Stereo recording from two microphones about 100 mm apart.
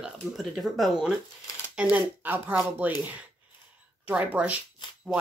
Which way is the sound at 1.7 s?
15° right (ahead or behind).